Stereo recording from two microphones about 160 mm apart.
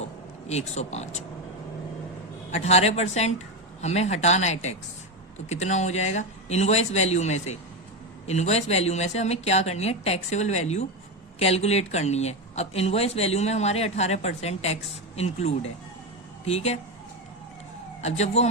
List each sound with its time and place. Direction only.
0.0 s a sound: 45° left (ahead or behind)
2.5 s a woman's voice: 40° left (ahead or behind)
18.0 s speech: 45° left (ahead or behind)